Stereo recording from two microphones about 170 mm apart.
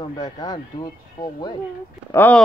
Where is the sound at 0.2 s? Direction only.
25° left (ahead or behind).